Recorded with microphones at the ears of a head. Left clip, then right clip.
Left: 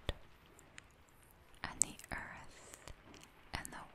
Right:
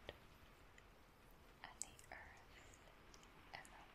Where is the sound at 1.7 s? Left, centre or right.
Left.